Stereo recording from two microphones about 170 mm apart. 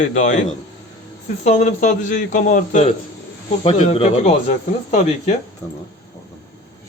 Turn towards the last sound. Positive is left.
turn(degrees=40)  # may be behind; listen again after turning